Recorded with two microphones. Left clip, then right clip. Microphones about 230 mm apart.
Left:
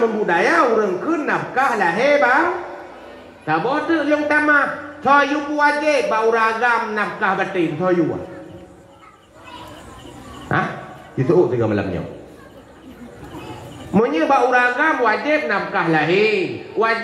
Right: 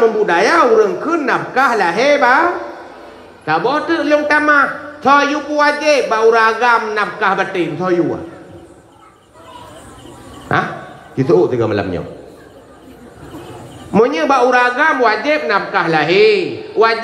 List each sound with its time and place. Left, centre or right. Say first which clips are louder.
0.3 s a man's voice: right 2 dB; right
3.4 s a man's voice: right 4 dB; right
10.5 s a man's voice: right 4 dB; right
13.9 s a man's voice: right 4 dB; right